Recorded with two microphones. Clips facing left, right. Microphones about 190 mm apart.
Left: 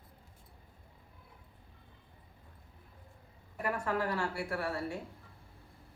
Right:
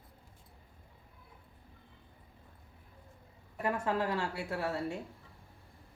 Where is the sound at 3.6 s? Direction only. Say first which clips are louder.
Right 1 dB; 20° right (ahead or behind).